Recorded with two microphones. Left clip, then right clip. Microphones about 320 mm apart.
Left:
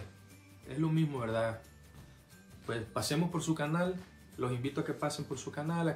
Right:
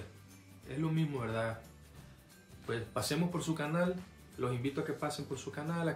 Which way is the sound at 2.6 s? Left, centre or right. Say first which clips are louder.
Left 1 dB; centre.